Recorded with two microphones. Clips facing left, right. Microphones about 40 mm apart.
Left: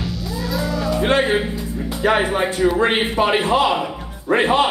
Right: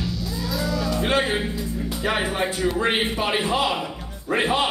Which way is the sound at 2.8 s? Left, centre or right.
Centre.